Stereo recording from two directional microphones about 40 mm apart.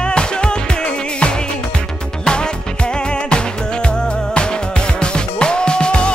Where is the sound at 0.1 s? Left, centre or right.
Left.